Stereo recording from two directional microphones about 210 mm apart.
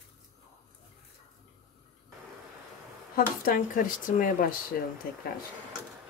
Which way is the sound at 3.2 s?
40° left (ahead or behind).